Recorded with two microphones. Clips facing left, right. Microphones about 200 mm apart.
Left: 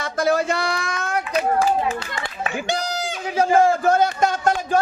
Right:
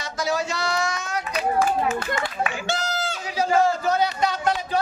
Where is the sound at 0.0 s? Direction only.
55° left (ahead or behind).